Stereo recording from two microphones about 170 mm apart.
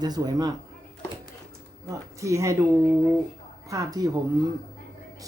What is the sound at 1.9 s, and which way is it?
Speech, 20° right (ahead or behind).